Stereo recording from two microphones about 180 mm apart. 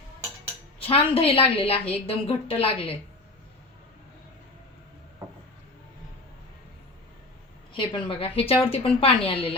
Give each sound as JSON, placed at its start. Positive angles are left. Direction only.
{"t": 0.8, "sound": "a woman's voice", "side_deg": 30}
{"t": 7.7, "sound": "a woman's voice", "side_deg": 30}